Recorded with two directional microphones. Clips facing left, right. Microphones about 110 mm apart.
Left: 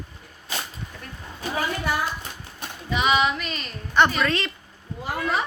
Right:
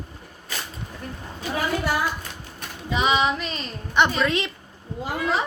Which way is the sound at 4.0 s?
15° right (ahead or behind).